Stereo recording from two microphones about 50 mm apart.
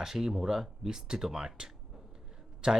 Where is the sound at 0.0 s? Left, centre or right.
Centre.